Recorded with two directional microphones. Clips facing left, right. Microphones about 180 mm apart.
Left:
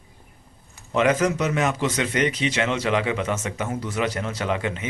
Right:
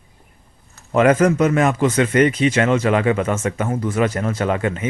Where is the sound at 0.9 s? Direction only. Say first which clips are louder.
Right 6 dB; 55° right (ahead or behind).